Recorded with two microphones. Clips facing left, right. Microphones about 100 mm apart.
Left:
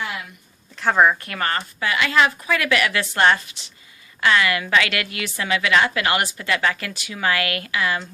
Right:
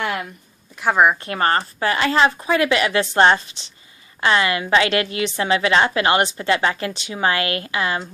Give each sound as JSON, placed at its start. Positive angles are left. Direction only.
{"t": 0.0, "sound": "a sound", "side_deg": -60}
{"t": 0.8, "sound": "speech", "side_deg": -10}
{"t": 1.2, "sound": "a woman's voice", "side_deg": -30}